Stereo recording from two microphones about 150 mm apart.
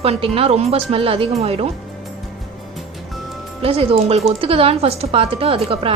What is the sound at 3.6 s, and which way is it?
A woman's voice, 40° right (ahead or behind).